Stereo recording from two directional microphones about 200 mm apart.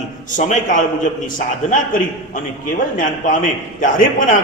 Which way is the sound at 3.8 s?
40° left (ahead or behind).